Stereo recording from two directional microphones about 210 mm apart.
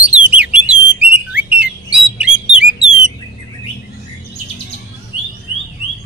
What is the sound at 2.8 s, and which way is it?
Bird, 30° left (ahead or behind).